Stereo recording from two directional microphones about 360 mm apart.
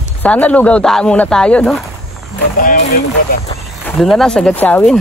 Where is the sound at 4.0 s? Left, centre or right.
Centre.